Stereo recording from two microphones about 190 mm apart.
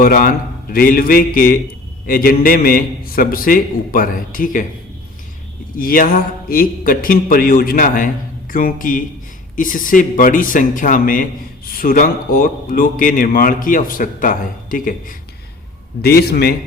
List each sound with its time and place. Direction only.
0.0 s speech: 50° left (ahead or behind)
5.7 s speech: 45° left (ahead or behind)
16.0 s a man's voice: 55° left (ahead or behind)